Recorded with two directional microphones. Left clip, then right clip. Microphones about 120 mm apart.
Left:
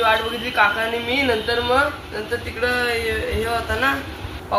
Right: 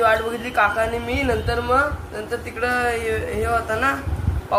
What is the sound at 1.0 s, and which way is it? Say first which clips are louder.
Speech: left 3 dB; 10° right (ahead or behind).